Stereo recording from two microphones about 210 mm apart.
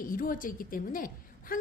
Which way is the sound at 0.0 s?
40° left (ahead or behind).